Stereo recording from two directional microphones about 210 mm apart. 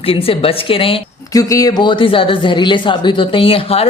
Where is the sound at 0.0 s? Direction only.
25° left (ahead or behind).